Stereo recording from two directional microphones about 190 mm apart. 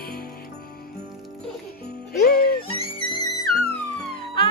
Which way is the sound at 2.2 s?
55° left (ahead or behind).